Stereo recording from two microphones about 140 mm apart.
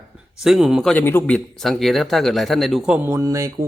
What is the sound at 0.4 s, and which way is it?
Speech, 5° right (ahead or behind).